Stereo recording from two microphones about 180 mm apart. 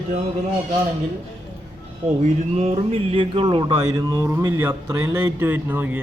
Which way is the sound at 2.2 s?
35° right (ahead or behind).